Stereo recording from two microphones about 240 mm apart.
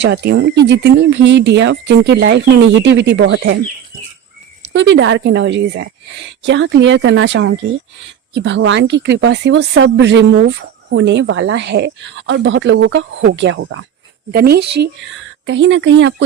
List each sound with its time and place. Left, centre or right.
0.0 s speech: right
4.7 s speech: right
14.3 s speech: right